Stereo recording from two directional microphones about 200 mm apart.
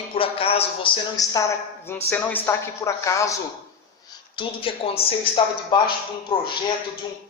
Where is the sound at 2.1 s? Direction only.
10° left (ahead or behind).